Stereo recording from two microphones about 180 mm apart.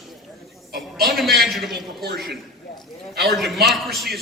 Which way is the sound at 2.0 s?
60° right (ahead or behind).